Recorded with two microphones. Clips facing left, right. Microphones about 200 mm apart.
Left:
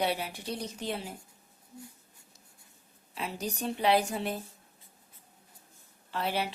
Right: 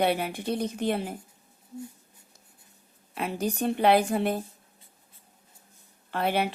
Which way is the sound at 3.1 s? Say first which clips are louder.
Right 7 dB; 55° right (ahead or behind).